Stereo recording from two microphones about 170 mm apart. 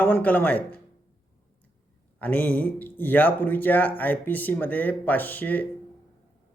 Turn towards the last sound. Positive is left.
turn(degrees=10)  # may be behind; listen again after turning